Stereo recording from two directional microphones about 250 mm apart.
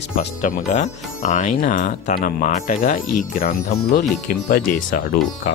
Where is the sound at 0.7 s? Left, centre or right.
Left.